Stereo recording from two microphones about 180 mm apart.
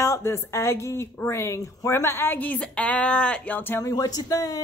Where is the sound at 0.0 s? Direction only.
15° left (ahead or behind).